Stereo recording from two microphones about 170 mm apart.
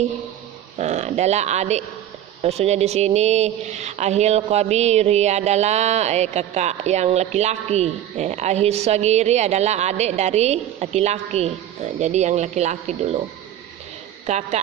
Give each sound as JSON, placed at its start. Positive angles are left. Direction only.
{"t": 0.8, "sound": "speech", "side_deg": -40}
{"t": 14.3, "sound": "a woman's voice", "side_deg": -45}